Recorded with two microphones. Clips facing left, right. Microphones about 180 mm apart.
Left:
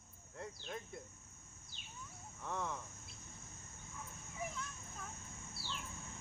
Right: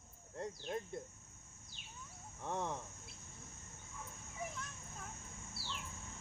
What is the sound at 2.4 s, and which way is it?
Speech, 25° right (ahead or behind).